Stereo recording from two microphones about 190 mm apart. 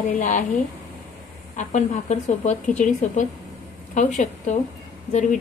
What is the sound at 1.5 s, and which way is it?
A woman's voice, 35° left (ahead or behind).